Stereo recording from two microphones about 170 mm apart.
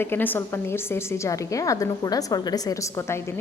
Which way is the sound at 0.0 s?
10° left (ahead or behind).